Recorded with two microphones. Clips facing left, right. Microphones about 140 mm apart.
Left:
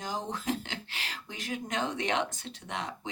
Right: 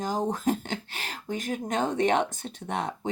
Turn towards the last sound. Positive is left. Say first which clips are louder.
# right 7 dB
turn(degrees=-50)  # may be behind; listen again after turning